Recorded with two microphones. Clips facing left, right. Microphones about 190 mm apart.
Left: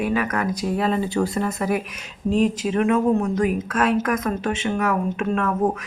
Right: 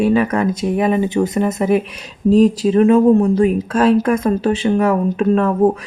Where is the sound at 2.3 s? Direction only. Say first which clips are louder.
Right 8 dB; 35° right (ahead or behind).